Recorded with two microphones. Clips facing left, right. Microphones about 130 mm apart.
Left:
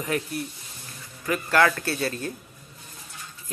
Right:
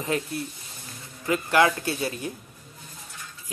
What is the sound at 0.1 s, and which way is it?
Speech, 25° right (ahead or behind).